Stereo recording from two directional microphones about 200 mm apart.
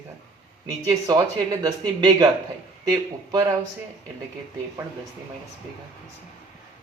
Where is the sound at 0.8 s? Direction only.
20° right (ahead or behind).